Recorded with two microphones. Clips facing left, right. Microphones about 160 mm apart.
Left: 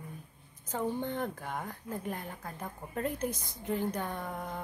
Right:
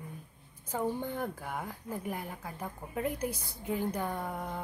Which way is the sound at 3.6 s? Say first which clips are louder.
Even; 15° right (ahead or behind).